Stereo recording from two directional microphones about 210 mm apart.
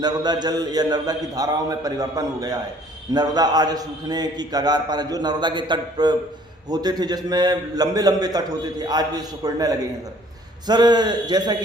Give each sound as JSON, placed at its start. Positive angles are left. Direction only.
{"t": 0.0, "sound": "a man's voice", "side_deg": -20}